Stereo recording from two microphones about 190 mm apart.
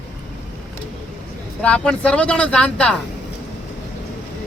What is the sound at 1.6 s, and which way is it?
Speech, 5° left (ahead or behind).